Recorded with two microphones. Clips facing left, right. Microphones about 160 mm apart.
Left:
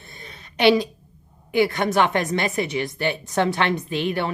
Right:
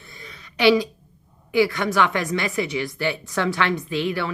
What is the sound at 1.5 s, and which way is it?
Speech, 55° left (ahead or behind).